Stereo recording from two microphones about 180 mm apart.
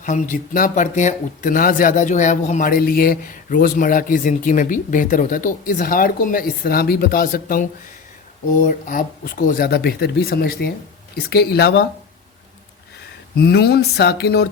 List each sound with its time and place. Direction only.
0.0 s speech: 45° left (ahead or behind); by 11.9 s 65° left (ahead or behind)
13.3 s speech: 65° left (ahead or behind)